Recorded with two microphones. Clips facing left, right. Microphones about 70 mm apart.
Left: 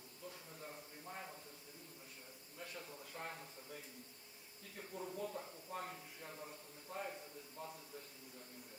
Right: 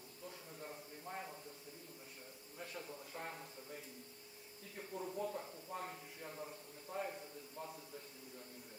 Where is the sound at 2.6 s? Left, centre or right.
Centre.